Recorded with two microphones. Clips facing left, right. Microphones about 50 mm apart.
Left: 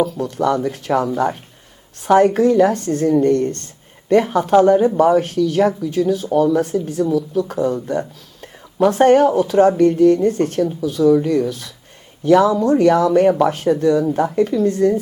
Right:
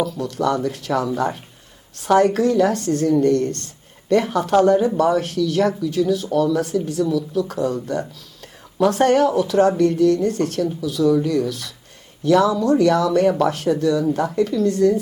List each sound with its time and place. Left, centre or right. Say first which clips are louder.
0.0 s speech: left 3 dB; left